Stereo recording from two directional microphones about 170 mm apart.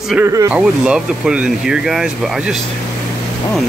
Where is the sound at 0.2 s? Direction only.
20° right (ahead or behind).